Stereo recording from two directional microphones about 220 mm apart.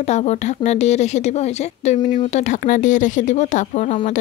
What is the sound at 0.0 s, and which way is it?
A woman's voice, 30° left (ahead or behind).